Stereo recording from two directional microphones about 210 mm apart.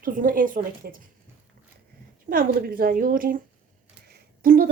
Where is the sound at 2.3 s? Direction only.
45° right (ahead or behind).